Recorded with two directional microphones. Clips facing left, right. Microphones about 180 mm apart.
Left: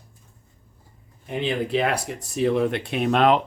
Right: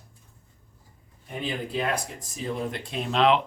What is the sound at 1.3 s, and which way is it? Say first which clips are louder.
Speech: left 7 dB; 75° left (ahead or behind).